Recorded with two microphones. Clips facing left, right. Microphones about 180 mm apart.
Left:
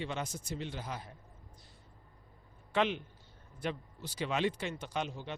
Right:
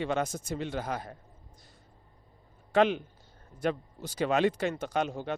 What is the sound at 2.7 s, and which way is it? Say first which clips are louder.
Speech: right 7 dB; 45° right (ahead or behind).